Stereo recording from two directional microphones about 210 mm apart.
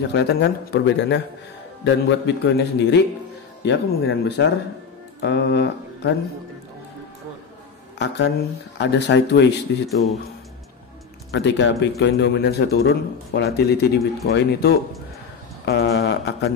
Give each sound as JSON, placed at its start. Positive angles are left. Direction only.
{"t": 0.0, "sound": "a man's voice", "side_deg": 55}
{"t": 8.0, "sound": "speech", "side_deg": 55}
{"t": 11.3, "sound": "a man's voice", "side_deg": 55}